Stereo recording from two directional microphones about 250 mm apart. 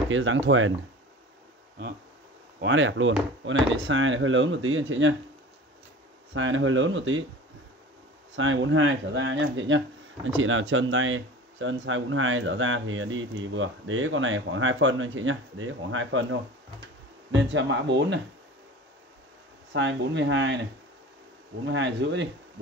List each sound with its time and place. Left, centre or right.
0.1 s speech: right
2.6 s speech: right
6.3 s speech: right
8.4 s speech: right
19.7 s speech: right
21.6 s speech: right